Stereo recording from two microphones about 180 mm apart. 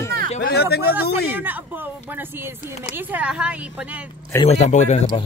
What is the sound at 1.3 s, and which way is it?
Speech, 10° right (ahead or behind).